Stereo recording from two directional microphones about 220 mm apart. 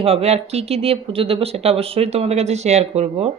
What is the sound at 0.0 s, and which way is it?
Speech, 25° right (ahead or behind).